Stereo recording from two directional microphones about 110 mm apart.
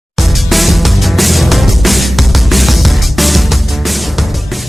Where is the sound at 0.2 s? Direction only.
Centre (ahead or behind).